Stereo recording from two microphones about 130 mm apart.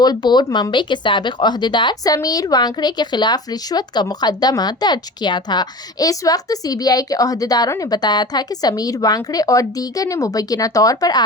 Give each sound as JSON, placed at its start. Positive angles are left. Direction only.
{"t": 0.0, "sound": "speech", "side_deg": 30}